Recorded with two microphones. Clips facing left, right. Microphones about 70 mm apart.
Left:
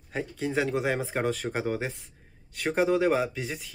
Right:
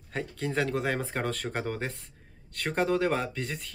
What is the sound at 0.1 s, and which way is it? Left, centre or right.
Speech, centre.